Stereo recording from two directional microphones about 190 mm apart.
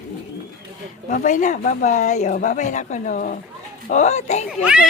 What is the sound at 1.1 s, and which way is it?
Speech, 40° left (ahead or behind).